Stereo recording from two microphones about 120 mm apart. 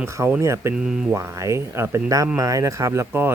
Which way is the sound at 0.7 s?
5° right (ahead or behind).